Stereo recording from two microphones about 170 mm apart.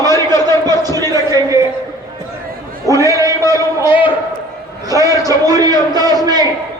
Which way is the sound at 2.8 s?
20° right (ahead or behind).